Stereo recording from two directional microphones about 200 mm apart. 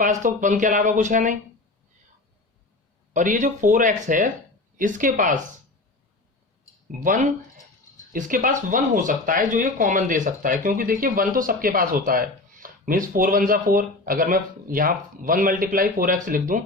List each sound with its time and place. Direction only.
0.0 s speech: 40° right (ahead or behind)
3.1 s speech: 40° right (ahead or behind)
7.0 s speech: 40° right (ahead or behind)